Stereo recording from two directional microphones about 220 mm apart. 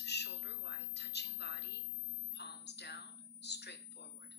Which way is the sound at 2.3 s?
50° left (ahead or behind).